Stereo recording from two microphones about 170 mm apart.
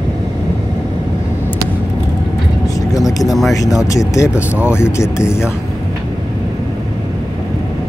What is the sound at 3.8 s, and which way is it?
Speech, 20° left (ahead or behind).